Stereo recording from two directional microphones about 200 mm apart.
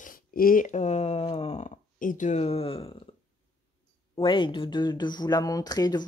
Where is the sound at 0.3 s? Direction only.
45° left (ahead or behind); by 2.9 s 30° left (ahead or behind).